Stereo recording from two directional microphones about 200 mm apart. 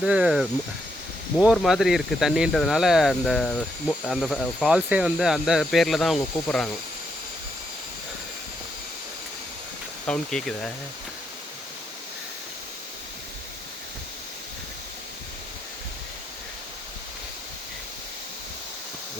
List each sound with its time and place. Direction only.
0.0 s speech: 5° right (ahead or behind)
10.1 s speech: 5° left (ahead or behind)